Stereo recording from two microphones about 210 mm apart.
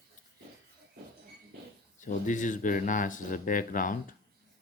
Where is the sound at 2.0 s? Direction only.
35° left (ahead or behind).